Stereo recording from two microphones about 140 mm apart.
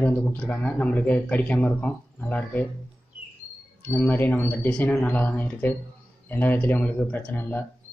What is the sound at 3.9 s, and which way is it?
Speech, 15° left (ahead or behind).